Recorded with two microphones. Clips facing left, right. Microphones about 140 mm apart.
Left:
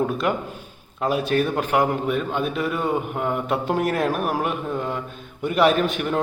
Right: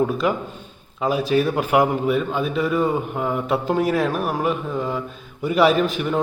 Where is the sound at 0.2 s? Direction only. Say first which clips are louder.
Right 2 dB; centre (ahead or behind).